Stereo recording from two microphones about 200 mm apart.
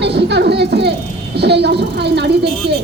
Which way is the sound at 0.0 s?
55° right (ahead or behind).